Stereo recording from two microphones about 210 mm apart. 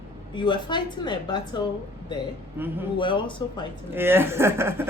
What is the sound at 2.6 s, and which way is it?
Speech, 10° right (ahead or behind).